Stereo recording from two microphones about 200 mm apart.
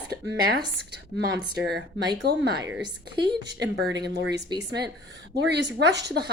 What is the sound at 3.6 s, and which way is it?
A woman's voice, 60° right (ahead or behind).